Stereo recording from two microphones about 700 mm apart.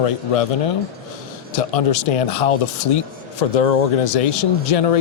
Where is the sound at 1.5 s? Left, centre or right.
Left.